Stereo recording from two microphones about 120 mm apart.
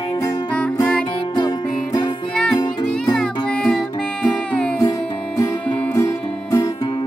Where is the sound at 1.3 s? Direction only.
35° left (ahead or behind).